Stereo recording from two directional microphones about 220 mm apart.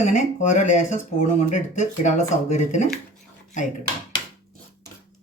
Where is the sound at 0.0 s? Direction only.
35° left (ahead or behind).